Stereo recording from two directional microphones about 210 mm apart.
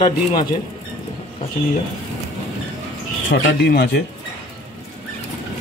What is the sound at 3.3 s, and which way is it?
Speech, 50° left (ahead or behind).